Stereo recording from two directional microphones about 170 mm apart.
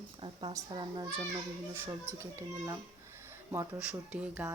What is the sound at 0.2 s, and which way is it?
Speech, 30° right (ahead or behind).